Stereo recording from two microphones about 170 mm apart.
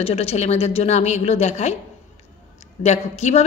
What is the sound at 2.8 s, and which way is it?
Speech, 40° left (ahead or behind).